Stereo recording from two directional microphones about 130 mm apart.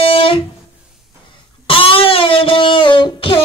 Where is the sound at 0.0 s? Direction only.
45° left (ahead or behind).